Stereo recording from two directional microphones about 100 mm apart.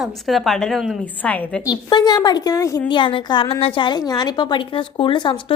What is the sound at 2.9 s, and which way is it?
Speech, 55° left (ahead or behind).